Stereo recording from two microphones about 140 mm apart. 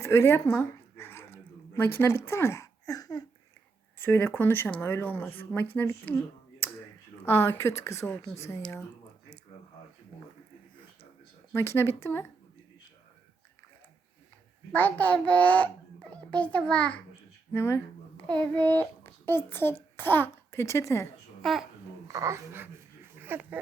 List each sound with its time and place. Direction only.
0.0 s dog: 20° left (ahead or behind)
3.9 s speech: 15° left (ahead or behind)
11.5 s speech: 20° left (ahead or behind)
14.7 s a child's voice: 10° left (ahead or behind)
21.4 s speech: centre (ahead or behind)
22.0 s speech: 25° right (ahead or behind)